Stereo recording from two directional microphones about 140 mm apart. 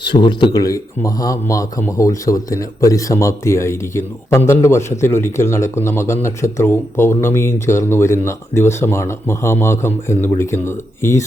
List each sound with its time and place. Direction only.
0.1 s speech: 35° left (ahead or behind)